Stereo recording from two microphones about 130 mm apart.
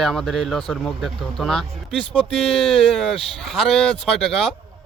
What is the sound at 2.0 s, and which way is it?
Speech, 45° left (ahead or behind).